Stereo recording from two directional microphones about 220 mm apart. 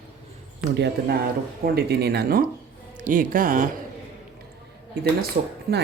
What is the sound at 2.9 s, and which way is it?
Music, 40° right (ahead or behind).